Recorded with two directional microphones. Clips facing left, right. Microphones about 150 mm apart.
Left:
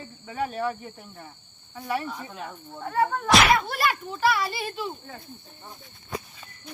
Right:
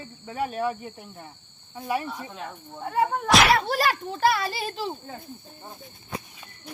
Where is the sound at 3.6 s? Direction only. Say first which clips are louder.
Right 2 dB; 35° right (ahead or behind).